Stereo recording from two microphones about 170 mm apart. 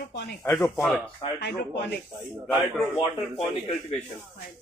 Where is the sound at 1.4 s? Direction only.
80° left.